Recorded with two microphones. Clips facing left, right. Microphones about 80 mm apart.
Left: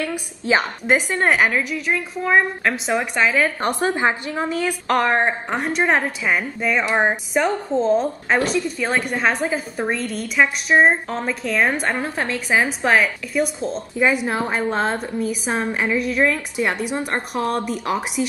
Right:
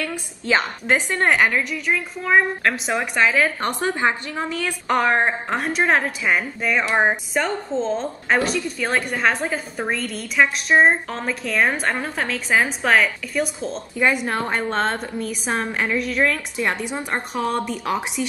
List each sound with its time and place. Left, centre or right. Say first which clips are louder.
0.0 s a woman's voice: left 2 dB; centre
3.6 s a woman's voice: left 2 dB; centre
4.8 s a woman's voice: even; centre
12.0 s a woman's voice: left 1 dB; centre